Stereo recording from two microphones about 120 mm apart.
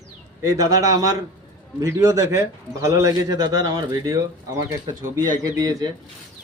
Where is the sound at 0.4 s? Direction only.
30° right (ahead or behind).